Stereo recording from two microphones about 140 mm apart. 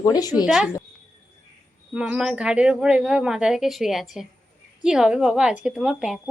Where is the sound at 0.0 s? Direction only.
25° left (ahead or behind).